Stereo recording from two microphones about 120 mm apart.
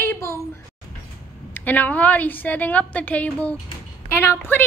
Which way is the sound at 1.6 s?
15° left (ahead or behind).